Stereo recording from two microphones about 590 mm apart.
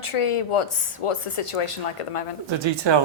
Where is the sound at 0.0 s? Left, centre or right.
Left.